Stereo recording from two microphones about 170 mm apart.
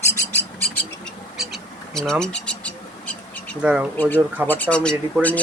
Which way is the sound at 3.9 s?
10° left (ahead or behind).